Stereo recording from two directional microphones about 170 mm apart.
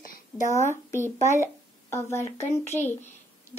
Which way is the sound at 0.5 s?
15° left (ahead or behind).